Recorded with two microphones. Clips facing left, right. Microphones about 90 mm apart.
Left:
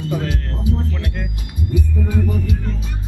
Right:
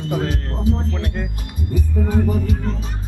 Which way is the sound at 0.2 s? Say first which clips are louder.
Right 2 dB; 30° right (ahead or behind).